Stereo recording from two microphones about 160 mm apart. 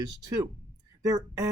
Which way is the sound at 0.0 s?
20° right (ahead or behind).